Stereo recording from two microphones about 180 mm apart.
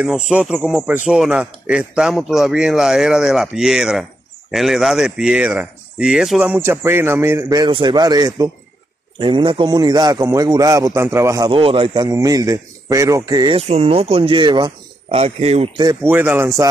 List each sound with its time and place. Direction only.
0.3 s a man's voice: 5° right (ahead or behind)
11.5 s a man's voice: 30° right (ahead or behind)
13.6 s speech: 35° right (ahead or behind)
15.8 s speech: 15° right (ahead or behind)